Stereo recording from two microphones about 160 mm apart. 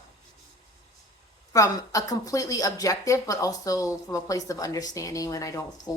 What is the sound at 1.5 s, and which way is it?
Speech, 20° left (ahead or behind).